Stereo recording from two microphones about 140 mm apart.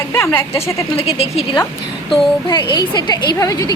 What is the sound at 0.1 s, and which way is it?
Speech, 15° left (ahead or behind).